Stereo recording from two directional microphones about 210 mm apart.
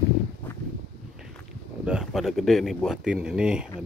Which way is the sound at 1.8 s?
Centre (ahead or behind).